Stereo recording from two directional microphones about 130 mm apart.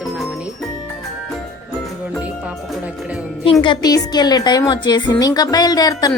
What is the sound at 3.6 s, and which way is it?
A woman's voice, 35° left (ahead or behind).